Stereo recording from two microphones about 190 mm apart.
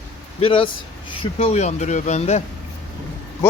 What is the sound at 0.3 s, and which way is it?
Speech, 30° left (ahead or behind).